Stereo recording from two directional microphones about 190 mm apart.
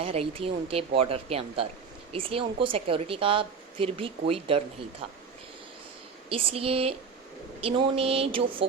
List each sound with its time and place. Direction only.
0.0 s a woman's voice: 30° right (ahead or behind)
6.2 s a woman's voice: 30° right (ahead or behind)